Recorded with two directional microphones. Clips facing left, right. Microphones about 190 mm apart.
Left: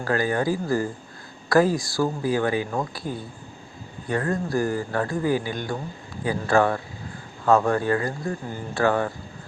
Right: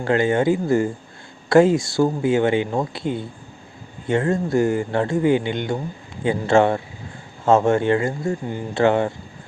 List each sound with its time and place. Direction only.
0.0 s speech: 25° right (ahead or behind)